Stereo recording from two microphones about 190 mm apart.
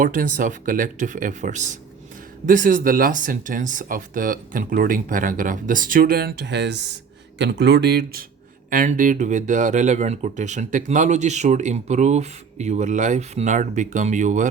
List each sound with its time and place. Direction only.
0.0 s speech: 45° right (ahead or behind)
8.7 s speech: 45° right (ahead or behind)